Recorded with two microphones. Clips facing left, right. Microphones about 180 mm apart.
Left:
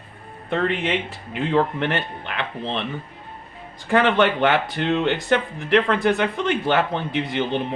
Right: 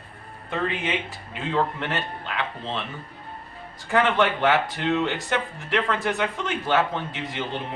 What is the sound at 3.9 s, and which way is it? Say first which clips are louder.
Speech: left 3 dB; 65° left (ahead or behind).